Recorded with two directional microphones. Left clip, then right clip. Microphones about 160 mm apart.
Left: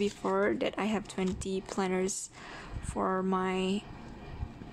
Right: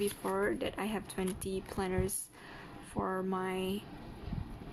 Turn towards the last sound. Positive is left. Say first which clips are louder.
# left 5 dB
turn(degrees=25)  # may be behind; listen again after turning